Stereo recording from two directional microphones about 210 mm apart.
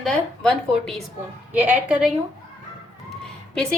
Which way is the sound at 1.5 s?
10° right (ahead or behind).